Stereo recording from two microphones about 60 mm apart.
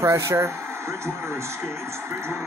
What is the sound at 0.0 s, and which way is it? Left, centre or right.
Speech, right.